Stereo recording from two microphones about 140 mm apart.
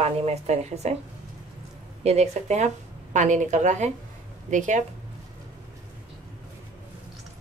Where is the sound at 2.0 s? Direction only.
50° right (ahead or behind).